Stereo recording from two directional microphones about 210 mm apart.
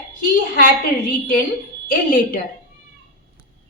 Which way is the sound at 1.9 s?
40° left (ahead or behind).